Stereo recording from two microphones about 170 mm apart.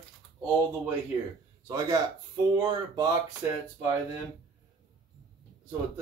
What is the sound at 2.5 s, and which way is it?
Speech, 25° right (ahead or behind).